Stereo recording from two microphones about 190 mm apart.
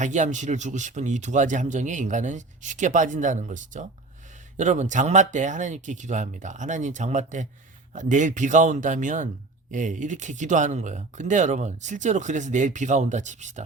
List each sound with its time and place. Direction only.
0.0 s speech: 40° right (ahead or behind)